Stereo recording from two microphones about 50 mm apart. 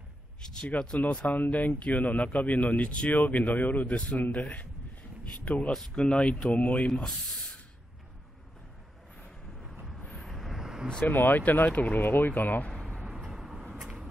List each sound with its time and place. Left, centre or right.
0.4 s speech: centre
1.2 s speech: left
5.7 s speech: centre
6.0 s speech: left
10.2 s vehicle: centre
11.1 s speech: left
13.3 s vehicle: centre